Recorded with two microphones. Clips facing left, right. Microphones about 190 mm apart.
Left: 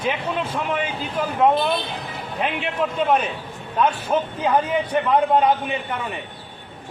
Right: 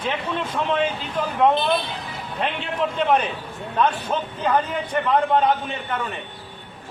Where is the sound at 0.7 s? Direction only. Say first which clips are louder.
Right 2 dB; 10° left (ahead or behind).